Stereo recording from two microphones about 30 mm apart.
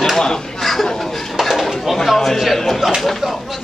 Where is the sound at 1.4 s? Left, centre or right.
Centre.